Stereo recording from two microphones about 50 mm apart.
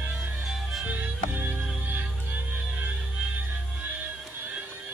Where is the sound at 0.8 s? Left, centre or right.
Right.